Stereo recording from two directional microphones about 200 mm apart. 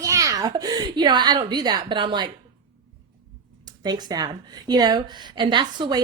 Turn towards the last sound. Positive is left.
turn(degrees=-20)  # may be behind; listen again after turning